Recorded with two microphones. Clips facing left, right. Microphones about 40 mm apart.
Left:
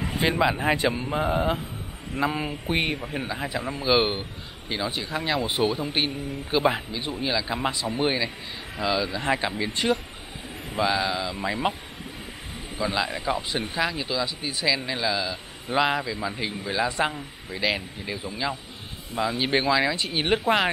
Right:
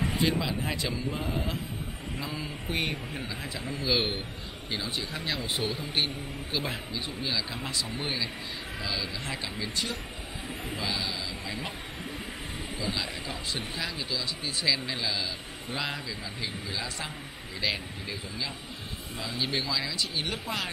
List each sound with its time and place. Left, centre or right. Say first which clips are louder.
0.2 s speech: left 9 dB; left
2.6 s a man's voice: left 4 dB; left
4.6 s a man's voice: left 5 dB; centre
12.8 s a man's voice: left 9 dB; centre; by 20.7 s left